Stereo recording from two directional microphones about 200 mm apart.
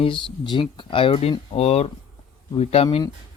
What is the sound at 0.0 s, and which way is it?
Speech, 25° left (ahead or behind).